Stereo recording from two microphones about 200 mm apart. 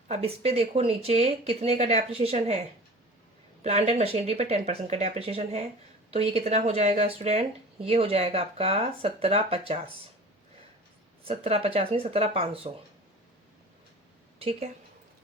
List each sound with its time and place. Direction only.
0.1 s speech: 30° right (ahead or behind)
11.2 s speech: 30° right (ahead or behind)
14.3 s a woman's voice: 30° right (ahead or behind)